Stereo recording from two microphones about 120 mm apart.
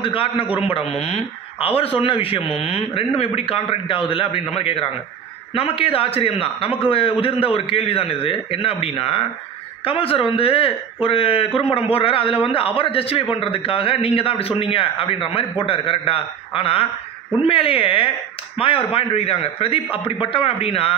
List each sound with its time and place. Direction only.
0.0 s speech: 50° left (ahead or behind)